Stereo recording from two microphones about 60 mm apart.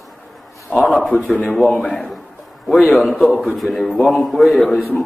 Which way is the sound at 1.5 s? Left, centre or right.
Centre.